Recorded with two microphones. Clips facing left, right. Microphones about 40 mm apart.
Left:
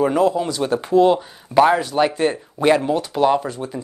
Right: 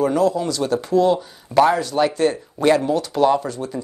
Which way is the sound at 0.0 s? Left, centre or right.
Left.